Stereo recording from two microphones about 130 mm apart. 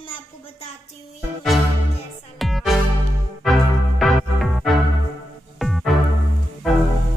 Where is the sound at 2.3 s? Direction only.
Centre (ahead or behind).